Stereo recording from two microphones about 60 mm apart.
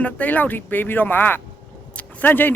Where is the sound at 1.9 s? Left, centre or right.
Left.